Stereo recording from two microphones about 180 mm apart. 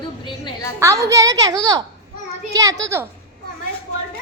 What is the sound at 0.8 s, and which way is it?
A woman's voice, 15° right (ahead or behind).